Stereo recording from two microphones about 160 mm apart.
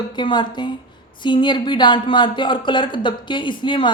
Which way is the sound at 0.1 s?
30° left (ahead or behind).